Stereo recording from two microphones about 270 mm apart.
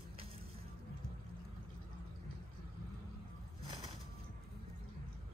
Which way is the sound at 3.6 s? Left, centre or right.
Centre.